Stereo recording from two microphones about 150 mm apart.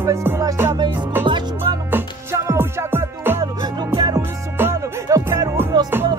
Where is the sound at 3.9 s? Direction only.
30° right (ahead or behind).